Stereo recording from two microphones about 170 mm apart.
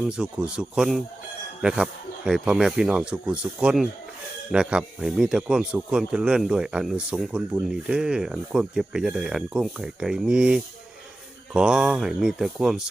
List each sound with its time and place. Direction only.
0.0 s speech: 5° right (ahead or behind)